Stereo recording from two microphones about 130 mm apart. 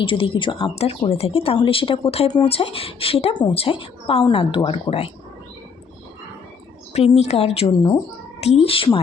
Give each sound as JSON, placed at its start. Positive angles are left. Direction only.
{"t": 0.0, "sound": "a woman's voice", "side_deg": 40}
{"t": 6.9, "sound": "a woman's voice", "side_deg": 50}